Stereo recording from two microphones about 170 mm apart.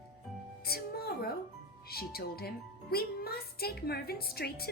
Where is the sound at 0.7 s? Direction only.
65° left (ahead or behind).